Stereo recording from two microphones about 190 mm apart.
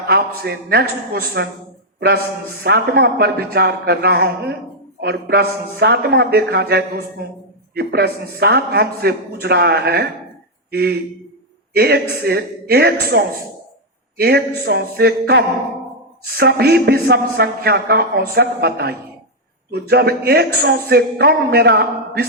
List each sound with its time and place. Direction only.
0.1 s a man's voice: 55° right (ahead or behind)